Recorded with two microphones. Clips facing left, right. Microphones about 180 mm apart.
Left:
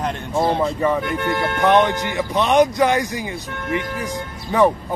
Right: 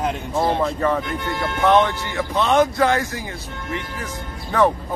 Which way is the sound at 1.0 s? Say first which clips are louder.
Left 4 dB; 60° left (ahead or behind).